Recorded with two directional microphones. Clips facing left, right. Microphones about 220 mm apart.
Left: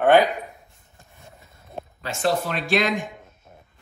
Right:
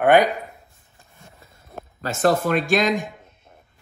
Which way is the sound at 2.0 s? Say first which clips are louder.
Right 4 dB; 45° right (ahead or behind).